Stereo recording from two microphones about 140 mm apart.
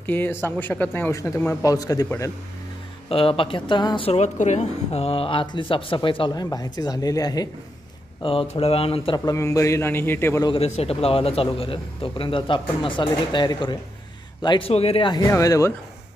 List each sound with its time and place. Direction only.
0.0 s speech: 15° left (ahead or behind)
3.1 s a man's voice: 40° left (ahead or behind)
4.1 s a man's voice: 55° left (ahead or behind); by 7.4 s 25° left (ahead or behind)
8.2 s a man's voice: 40° left (ahead or behind)
9.2 s a man's voice: 25° left (ahead or behind)
10.4 s a man's voice: 45° left (ahead or behind)
14.7 s speech: 45° left (ahead or behind); by 15.7 s 20° left (ahead or behind)